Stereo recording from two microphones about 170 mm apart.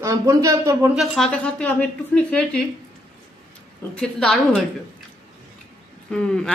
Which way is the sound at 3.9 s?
5° left (ahead or behind).